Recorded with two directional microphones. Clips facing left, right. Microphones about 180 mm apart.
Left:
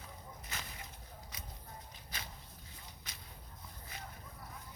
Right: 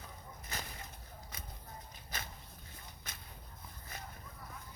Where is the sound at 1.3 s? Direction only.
50° right (ahead or behind).